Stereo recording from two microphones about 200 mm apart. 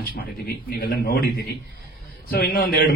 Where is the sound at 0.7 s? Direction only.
55° left (ahead or behind).